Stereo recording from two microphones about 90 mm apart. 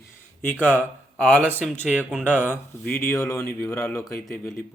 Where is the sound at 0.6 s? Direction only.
20° left (ahead or behind).